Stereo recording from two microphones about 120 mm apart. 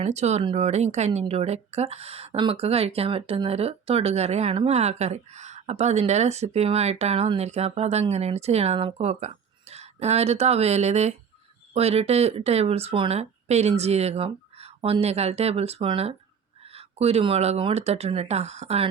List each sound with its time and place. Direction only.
0.0 s speech: 65° right (ahead or behind)